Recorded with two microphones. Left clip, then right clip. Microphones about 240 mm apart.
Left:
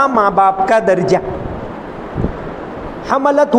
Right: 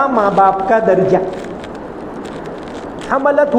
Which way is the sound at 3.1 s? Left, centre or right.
Left.